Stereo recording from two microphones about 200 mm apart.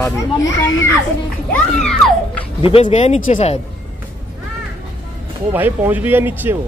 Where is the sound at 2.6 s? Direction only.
25° left (ahead or behind).